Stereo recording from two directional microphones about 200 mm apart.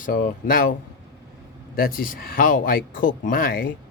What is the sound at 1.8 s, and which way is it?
Speech, 45° left (ahead or behind).